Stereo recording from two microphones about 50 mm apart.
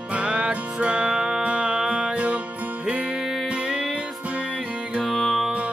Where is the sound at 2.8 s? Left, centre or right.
Centre.